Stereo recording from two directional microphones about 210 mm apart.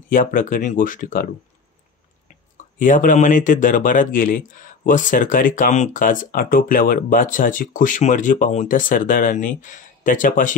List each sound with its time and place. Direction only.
0.1 s speech: 40° left (ahead or behind)
2.2 s speech: 35° left (ahead or behind)